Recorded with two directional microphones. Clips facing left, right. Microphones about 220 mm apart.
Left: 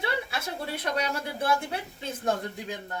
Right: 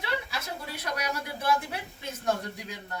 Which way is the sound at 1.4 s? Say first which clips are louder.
Left 1 dB; 30° left (ahead or behind).